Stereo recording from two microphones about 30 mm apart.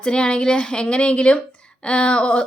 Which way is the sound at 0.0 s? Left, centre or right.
Left.